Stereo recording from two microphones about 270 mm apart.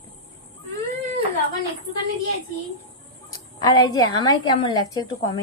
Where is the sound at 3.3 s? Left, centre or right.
Centre.